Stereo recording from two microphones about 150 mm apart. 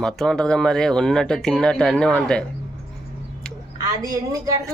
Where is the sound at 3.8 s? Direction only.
20° right (ahead or behind).